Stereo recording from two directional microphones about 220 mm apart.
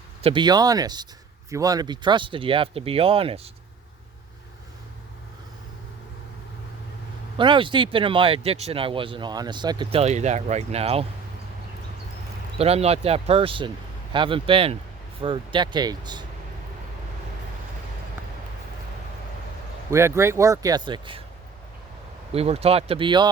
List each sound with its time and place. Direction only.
0.2 s speech: 25° right (ahead or behind)
7.3 s speech: 20° right (ahead or behind)
12.5 s speech: 25° right (ahead or behind)
19.9 s speech: 10° right (ahead or behind)
22.3 s speech: 25° right (ahead or behind)